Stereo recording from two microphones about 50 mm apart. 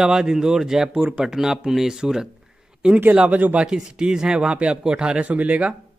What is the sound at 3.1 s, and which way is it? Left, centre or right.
Speech, right.